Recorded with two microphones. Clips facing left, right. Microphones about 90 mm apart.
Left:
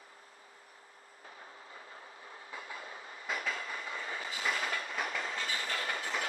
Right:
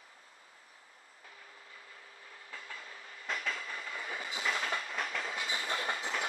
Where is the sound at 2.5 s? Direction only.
20° left (ahead or behind).